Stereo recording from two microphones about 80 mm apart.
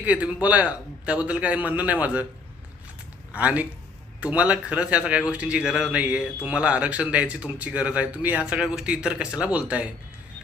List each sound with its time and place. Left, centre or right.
0.0 s speech: centre
3.3 s speech: centre